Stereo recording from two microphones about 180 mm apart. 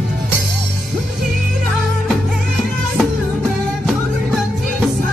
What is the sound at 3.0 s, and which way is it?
Music, centre (ahead or behind).